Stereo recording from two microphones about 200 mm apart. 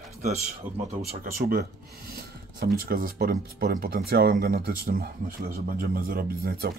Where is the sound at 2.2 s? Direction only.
50° right (ahead or behind).